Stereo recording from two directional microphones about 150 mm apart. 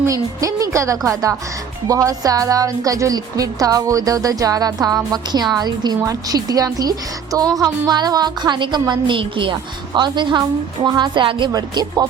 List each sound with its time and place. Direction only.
0.0 s a woman's voice: 20° right (ahead or behind)